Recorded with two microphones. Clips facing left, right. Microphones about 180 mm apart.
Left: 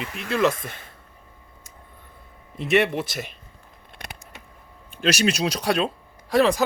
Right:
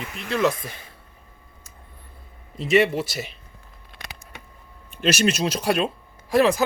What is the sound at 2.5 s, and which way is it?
Speech, 60° left (ahead or behind).